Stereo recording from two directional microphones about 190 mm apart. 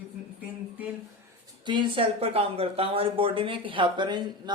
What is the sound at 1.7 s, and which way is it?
Speech, 25° right (ahead or behind).